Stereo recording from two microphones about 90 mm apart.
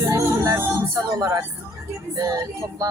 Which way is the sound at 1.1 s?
40° right (ahead or behind).